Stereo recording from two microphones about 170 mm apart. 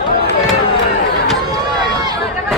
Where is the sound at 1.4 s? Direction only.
25° right (ahead or behind).